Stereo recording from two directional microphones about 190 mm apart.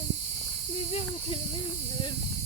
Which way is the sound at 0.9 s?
30° left (ahead or behind).